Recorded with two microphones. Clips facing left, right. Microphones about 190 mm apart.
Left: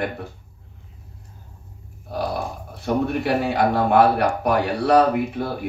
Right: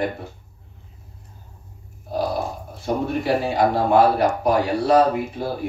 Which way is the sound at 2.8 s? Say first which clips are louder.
Left 1 dB; 65° left (ahead or behind).